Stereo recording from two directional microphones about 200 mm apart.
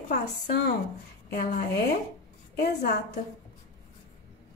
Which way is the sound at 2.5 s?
55° left (ahead or behind).